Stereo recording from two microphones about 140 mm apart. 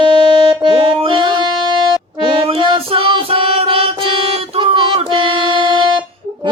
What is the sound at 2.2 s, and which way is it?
Music, 40° right (ahead or behind).